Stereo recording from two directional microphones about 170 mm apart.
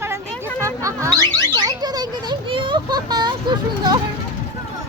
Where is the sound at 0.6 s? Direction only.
20° right (ahead or behind).